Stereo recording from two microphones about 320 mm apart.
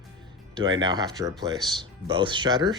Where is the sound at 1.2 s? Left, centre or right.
Centre.